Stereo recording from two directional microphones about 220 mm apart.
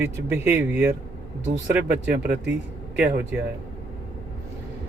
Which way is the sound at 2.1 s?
40° right (ahead or behind).